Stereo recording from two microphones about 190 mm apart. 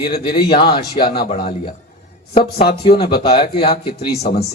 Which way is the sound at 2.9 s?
30° left (ahead or behind).